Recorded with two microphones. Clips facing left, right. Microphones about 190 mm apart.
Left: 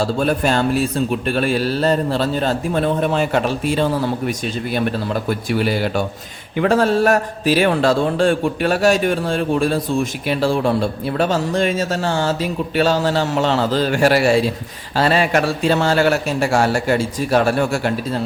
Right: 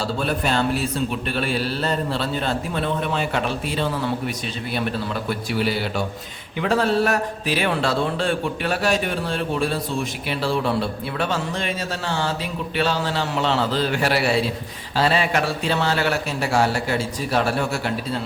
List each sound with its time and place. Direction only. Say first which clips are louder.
0.0 s a man's voice: left 6 dB; 45° left (ahead or behind)